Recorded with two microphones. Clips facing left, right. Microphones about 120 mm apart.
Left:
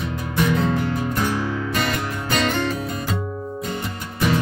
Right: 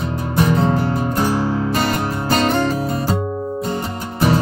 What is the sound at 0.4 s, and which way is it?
Music, 35° right (ahead or behind).